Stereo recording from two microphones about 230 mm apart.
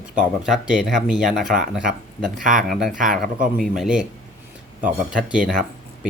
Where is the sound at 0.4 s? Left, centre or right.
Centre.